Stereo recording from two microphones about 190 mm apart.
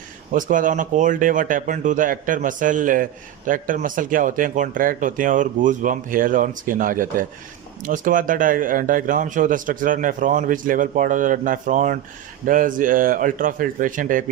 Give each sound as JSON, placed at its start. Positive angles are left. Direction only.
{"t": 0.3, "sound": "speech", "side_deg": -45}